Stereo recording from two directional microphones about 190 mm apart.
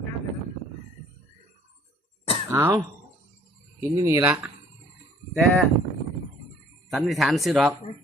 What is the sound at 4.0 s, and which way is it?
Speech, 15° right (ahead or behind).